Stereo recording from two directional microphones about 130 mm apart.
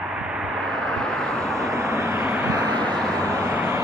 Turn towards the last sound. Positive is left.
turn(degrees=-20)  # may be behind; listen again after turning